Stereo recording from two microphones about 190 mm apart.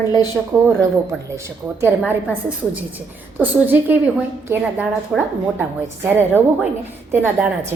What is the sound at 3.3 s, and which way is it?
A woman's voice, 10° right (ahead or behind).